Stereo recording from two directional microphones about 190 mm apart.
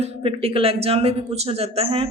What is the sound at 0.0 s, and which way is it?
Speech, 30° right (ahead or behind).